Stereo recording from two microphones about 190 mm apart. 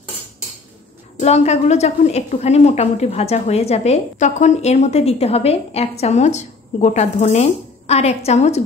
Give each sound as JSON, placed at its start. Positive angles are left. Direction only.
{"t": 1.2, "sound": "a woman's voice", "side_deg": 35}